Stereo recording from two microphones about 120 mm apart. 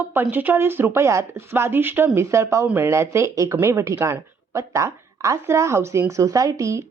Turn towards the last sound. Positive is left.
turn(degrees=-25)  # may be behind; listen again after turning